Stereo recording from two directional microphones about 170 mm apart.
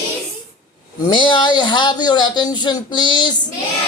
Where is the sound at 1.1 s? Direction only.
25° left (ahead or behind).